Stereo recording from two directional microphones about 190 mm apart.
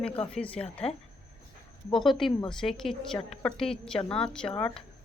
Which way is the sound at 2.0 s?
Centre (ahead or behind).